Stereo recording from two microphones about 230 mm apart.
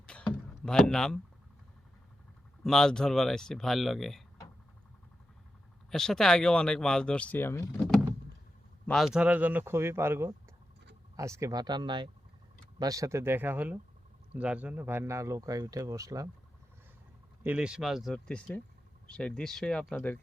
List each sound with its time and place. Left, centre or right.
0.0 s a sound: centre
2.6 s speech: centre
5.9 s speech: centre
8.9 s speech: centre
17.4 s speech: centre